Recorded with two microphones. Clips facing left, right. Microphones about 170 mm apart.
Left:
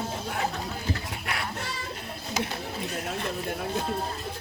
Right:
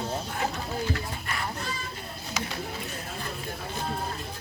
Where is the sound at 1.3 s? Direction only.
75° left (ahead or behind).